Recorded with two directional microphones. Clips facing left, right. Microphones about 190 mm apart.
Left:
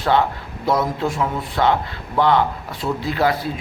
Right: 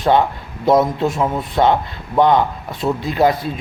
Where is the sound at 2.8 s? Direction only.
20° right (ahead or behind).